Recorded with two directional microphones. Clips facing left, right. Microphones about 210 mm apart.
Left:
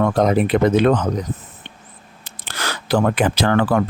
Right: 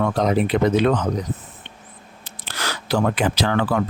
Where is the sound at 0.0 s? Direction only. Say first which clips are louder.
Left 3 dB; 50° left (ahead or behind).